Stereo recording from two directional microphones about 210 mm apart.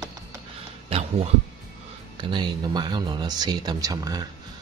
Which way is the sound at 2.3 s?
20° right (ahead or behind).